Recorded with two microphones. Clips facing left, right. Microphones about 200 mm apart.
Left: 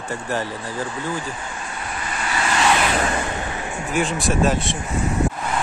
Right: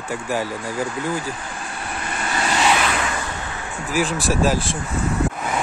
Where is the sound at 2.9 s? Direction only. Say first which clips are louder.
Left 3 dB; 35° left (ahead or behind).